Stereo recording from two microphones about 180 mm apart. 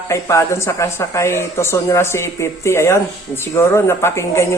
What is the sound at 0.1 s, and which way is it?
Speech, 15° left (ahead or behind).